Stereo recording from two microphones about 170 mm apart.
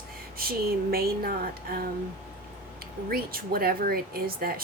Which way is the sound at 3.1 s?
60° right (ahead or behind).